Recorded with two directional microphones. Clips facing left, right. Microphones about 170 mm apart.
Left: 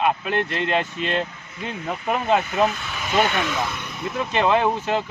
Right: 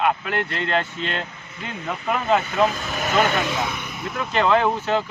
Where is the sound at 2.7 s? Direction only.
40° right (ahead or behind).